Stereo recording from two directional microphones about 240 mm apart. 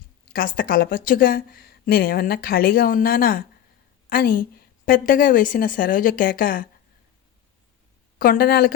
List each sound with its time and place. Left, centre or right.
0.3 s a woman's voice: left
8.2 s a woman's voice: left